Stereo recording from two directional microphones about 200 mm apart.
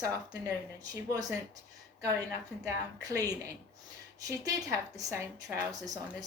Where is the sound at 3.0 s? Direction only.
15° right (ahead or behind).